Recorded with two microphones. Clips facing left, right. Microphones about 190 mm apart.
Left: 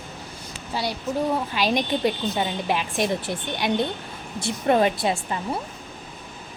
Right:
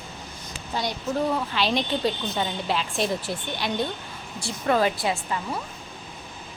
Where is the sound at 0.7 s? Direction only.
5° left (ahead or behind); by 5.6 s 25° left (ahead or behind).